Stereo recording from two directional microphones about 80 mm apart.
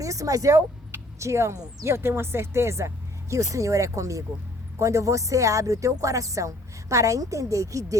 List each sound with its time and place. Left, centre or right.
0.0 s speech: right
0.9 s a woman's voice: right